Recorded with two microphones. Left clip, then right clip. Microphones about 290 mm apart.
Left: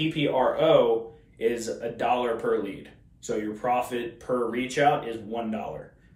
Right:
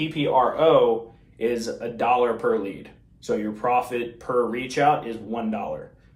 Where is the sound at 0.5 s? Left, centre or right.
Centre.